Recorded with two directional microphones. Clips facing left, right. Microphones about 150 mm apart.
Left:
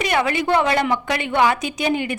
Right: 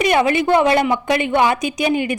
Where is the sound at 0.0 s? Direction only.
20° right (ahead or behind).